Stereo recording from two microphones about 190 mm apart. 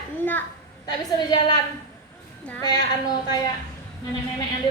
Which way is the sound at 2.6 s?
20° left (ahead or behind).